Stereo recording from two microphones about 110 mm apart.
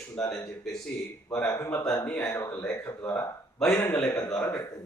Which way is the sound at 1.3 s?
10° left (ahead or behind).